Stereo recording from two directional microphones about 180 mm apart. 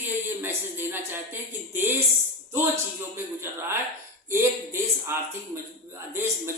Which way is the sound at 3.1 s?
15° right (ahead or behind).